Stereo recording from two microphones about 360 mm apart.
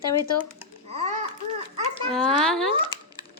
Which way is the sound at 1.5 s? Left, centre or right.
Centre.